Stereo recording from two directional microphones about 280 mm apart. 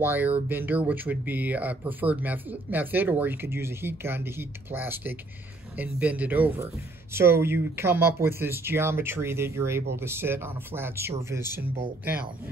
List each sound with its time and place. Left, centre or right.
0.0 s speech: centre